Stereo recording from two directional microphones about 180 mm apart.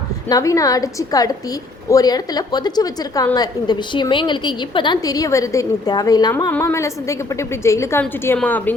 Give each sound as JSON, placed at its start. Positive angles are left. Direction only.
{"t": 0.3, "sound": "a woman's voice", "side_deg": 20}